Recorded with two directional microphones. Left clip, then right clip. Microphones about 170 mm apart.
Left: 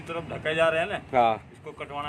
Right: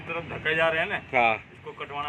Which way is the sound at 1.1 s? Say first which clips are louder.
Left 1 dB; 30° left (ahead or behind).